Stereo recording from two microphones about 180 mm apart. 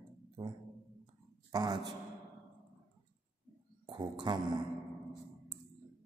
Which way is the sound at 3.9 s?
25° right (ahead or behind).